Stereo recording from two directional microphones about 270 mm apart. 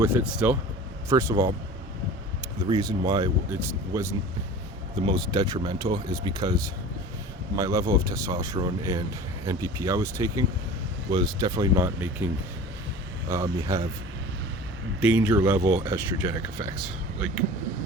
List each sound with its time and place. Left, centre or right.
0.0 s speech: centre
2.6 s speech: centre
15.0 s speech: centre